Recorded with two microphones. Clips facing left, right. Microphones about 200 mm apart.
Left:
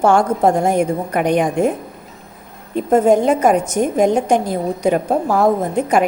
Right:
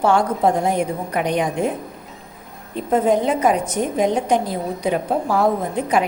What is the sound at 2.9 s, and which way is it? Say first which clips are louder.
A woman's voice: left 4 dB; 45° left (ahead or behind).